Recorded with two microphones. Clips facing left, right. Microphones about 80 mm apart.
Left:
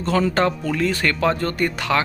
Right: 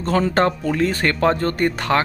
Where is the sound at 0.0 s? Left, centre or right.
Right.